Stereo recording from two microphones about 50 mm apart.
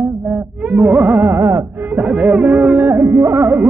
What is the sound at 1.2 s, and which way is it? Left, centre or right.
Carnatic music, right.